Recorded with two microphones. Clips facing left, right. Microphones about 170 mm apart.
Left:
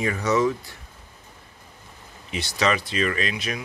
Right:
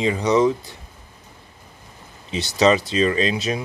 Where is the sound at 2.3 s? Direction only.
25° right (ahead or behind).